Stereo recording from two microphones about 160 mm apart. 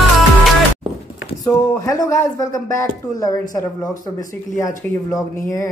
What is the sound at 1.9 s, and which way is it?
Speech, 20° left (ahead or behind).